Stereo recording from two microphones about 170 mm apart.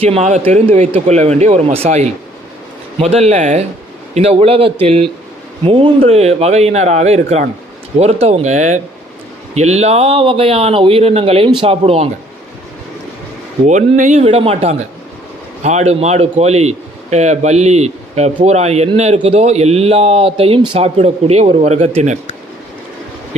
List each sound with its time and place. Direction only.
0.0 s a man's voice: 40° right (ahead or behind)
13.7 s a man's voice: 45° right (ahead or behind)